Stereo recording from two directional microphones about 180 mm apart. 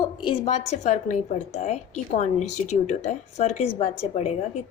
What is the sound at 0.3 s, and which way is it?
A woman's voice, 40° left (ahead or behind).